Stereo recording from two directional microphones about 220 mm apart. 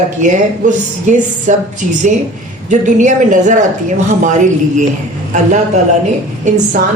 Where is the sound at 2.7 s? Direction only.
35° right (ahead or behind).